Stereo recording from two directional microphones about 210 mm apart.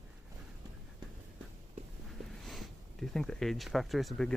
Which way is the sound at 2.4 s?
Centre (ahead or behind).